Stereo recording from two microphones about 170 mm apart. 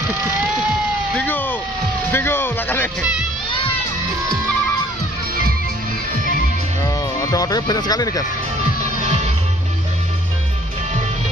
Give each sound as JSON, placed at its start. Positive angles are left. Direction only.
{"t": 1.1, "sound": "vehicle", "side_deg": 10}
{"t": 2.1, "sound": "music", "side_deg": 15}
{"t": 7.2, "sound": "speech", "side_deg": 20}